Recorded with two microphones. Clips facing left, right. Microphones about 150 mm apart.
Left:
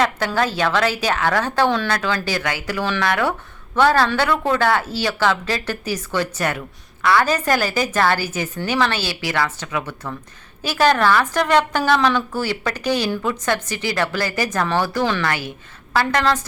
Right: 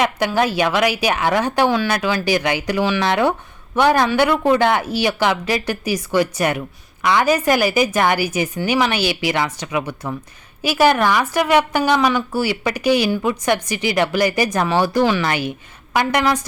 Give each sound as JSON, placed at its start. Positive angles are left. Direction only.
{"t": 0.3, "sound": "speech", "side_deg": -15}